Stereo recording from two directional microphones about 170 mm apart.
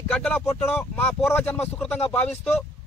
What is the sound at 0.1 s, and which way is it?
A man's voice, 10° left (ahead or behind).